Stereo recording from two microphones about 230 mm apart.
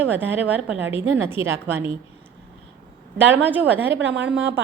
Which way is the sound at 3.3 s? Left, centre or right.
Centre.